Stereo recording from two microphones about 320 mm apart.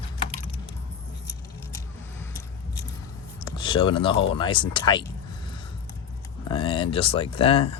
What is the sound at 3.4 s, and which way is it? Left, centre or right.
Speech, centre.